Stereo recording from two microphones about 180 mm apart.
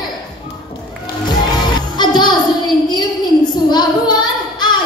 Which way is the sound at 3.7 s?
25° left (ahead or behind).